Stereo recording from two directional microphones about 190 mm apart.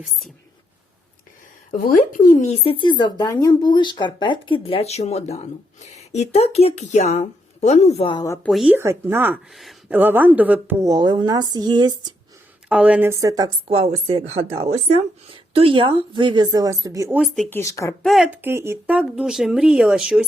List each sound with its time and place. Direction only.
1.7 s speech: 45° left (ahead or behind); by 8.4 s 20° left (ahead or behind)
8.4 s speech: centre (ahead or behind)
8.7 s a woman's voice: 15° right (ahead or behind)
12.6 s a woman's voice: 5° right (ahead or behind)
13.7 s a woman's voice: 30° right (ahead or behind); by 17.2 s 15° right (ahead or behind)
17.2 s speech: centre (ahead or behind)
17.6 s speech: 15° left (ahead or behind)
18.0 s speech: centre (ahead or behind)
18.4 s speech: 15° right (ahead or behind)